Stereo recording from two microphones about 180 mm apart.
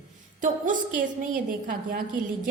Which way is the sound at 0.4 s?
45° right (ahead or behind).